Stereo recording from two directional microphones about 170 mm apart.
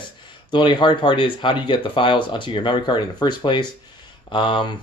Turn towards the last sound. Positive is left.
turn(degrees=25)  # may be behind; listen again after turning